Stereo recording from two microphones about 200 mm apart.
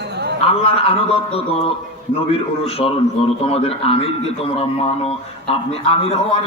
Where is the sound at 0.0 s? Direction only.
55° right (ahead or behind).